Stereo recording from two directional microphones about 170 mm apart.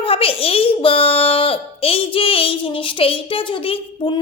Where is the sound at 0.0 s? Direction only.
35° left (ahead or behind).